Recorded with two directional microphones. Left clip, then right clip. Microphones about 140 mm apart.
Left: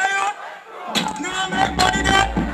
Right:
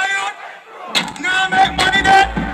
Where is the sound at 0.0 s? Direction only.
25° right (ahead or behind).